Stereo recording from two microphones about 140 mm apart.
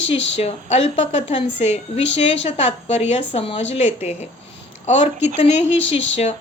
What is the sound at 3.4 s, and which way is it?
Speech, 40° left (ahead or behind).